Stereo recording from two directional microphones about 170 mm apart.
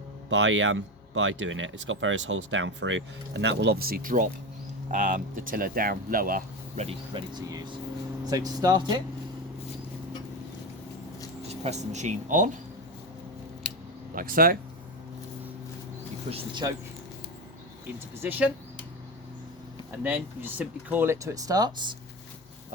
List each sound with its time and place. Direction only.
0.3 s speech: 90° right; by 6.8 s 55° right (ahead or behind)
6.8 s speech: 25° right (ahead or behind)
11.4 s speech: 40° right (ahead or behind)
14.2 s speech: 55° right (ahead or behind)
16.3 s speech: 25° right (ahead or behind)
18.2 s speech: 10° right (ahead or behind)
20.0 s speech: 10° right (ahead or behind)